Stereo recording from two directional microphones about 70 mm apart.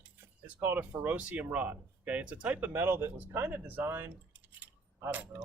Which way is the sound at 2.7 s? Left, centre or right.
Right.